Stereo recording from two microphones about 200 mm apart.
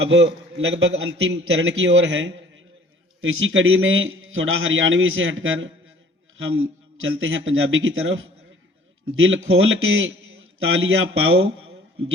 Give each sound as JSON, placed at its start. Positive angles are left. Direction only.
{"t": 0.0, "sound": "a man's voice", "side_deg": -65}
{"t": 3.2, "sound": "a man's voice", "side_deg": -85}